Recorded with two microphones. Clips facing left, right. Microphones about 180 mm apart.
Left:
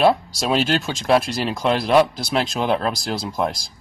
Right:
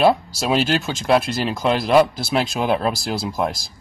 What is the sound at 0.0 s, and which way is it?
Speech, centre (ahead or behind).